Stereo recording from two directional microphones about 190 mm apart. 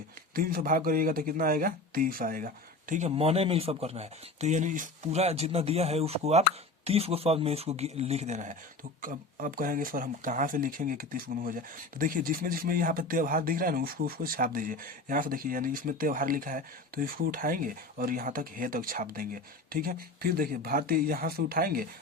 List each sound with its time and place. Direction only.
0.3 s speech: 50° right (ahead or behind)
2.9 s speech: 35° right (ahead or behind); by 21.8 s 50° right (ahead or behind)